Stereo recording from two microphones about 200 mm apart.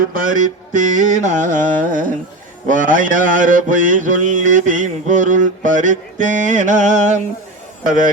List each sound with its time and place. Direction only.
0.1 s mantra: 40° right (ahead or behind)